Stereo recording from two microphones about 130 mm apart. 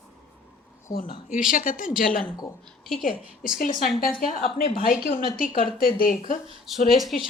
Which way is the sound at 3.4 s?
90° left.